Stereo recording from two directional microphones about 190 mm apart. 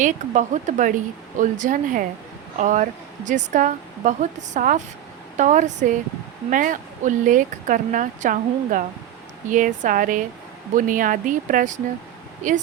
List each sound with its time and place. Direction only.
0.0 s a woman's voice: 40° right (ahead or behind)